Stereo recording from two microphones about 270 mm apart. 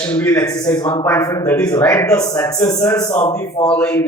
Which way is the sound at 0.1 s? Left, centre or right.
Centre.